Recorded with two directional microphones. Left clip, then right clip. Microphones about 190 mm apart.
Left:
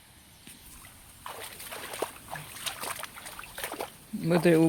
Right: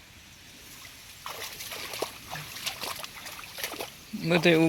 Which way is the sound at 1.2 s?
5° left (ahead or behind).